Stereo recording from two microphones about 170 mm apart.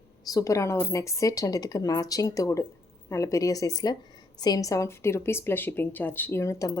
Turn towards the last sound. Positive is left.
turn(degrees=20)  # may be behind; listen again after turning